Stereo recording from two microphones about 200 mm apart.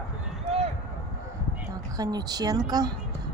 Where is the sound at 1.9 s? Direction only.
20° right (ahead or behind).